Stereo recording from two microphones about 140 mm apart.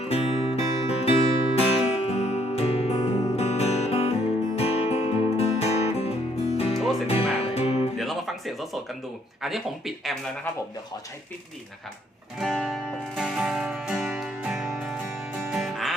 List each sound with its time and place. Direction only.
0.0 s music: 45° left (ahead or behind)
7.9 s a sound: centre (ahead or behind)
9.4 s speech: centre (ahead or behind)
12.4 s music: centre (ahead or behind)